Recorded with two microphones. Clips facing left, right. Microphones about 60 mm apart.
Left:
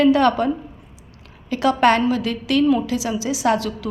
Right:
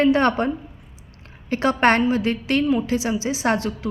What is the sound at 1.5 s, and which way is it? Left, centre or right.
A woman's voice, right.